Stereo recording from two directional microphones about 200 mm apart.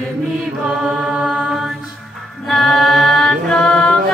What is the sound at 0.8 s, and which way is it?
Mantra, centre (ahead or behind).